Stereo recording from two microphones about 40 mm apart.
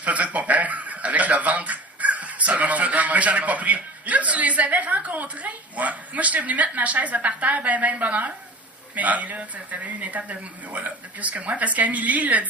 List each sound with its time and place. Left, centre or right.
0.0 s speech: right